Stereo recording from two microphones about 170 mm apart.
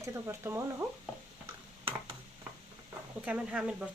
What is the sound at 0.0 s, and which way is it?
Speech, 15° right (ahead or behind).